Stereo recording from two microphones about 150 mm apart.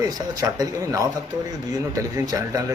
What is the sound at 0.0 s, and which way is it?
A man's voice, 25° right (ahead or behind).